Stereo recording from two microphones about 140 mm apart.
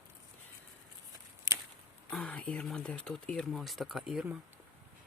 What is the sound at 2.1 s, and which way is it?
Speech, 5° left (ahead or behind).